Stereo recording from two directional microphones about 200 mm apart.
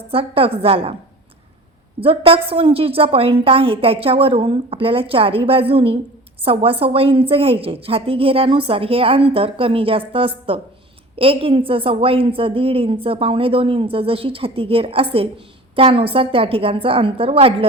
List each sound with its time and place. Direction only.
0.1 s a woman's voice: 30° right (ahead or behind)
2.0 s a woman's voice: 30° right (ahead or behind)